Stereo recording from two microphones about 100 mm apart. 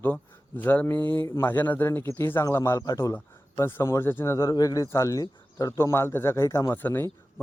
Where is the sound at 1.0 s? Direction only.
45° right (ahead or behind).